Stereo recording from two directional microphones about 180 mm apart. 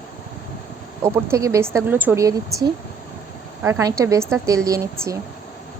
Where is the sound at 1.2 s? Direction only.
15° right (ahead or behind).